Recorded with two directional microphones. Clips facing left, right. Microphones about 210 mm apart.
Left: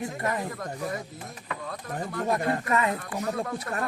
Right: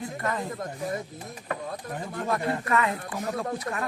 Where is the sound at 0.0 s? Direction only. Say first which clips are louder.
Left 1 dB; 20° left (ahead or behind).